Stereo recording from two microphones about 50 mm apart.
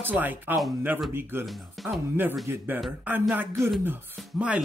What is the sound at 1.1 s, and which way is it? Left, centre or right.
Speech, right.